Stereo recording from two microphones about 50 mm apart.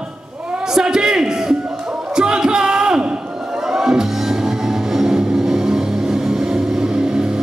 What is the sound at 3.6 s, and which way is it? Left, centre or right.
Music, centre.